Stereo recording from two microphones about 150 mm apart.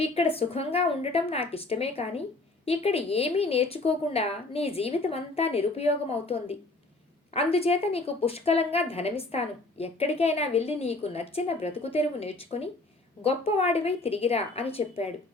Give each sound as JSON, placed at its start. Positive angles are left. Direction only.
{"t": 0.0, "sound": "a woman's voice", "side_deg": 40}